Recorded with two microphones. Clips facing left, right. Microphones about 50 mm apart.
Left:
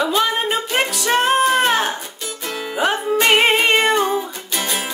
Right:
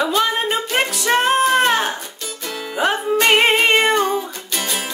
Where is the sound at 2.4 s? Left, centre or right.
Centre.